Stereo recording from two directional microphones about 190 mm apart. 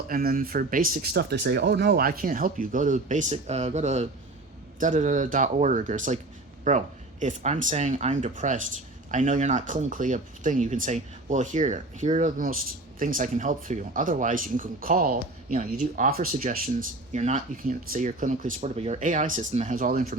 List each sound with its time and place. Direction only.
0.1 s speech: 50° right (ahead or behind)